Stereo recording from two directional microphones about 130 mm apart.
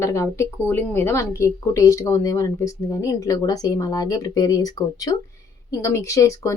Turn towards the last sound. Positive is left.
turn(degrees=25)  # may be behind; listen again after turning